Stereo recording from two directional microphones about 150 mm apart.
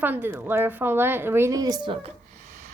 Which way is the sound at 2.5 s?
60° right (ahead or behind).